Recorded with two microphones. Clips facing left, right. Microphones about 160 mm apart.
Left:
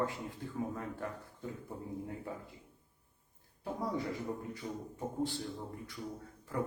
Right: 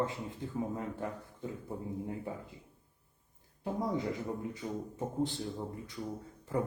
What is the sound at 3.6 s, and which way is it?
A man's voice, 20° right (ahead or behind).